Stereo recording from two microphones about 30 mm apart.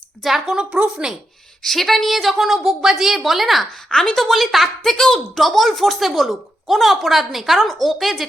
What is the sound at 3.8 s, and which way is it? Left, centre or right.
Speech, left.